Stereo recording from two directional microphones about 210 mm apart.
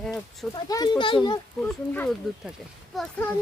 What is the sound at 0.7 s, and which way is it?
Speech, 20° left (ahead or behind).